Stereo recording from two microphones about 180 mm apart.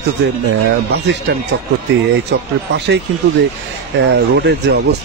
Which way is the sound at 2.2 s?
70° right (ahead or behind).